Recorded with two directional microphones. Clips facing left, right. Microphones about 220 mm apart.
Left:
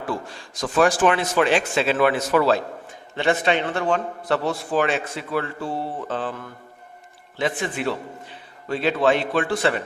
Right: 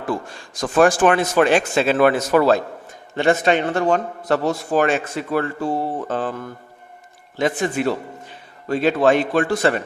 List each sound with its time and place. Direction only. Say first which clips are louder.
0.3 s a man's voice: right 3 dB; 50° right (ahead or behind)